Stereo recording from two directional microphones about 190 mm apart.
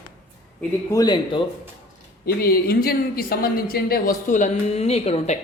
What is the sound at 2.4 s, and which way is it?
A woman's voice, 55° left (ahead or behind).